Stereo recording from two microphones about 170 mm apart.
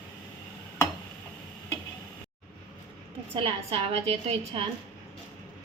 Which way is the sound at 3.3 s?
35° right (ahead or behind).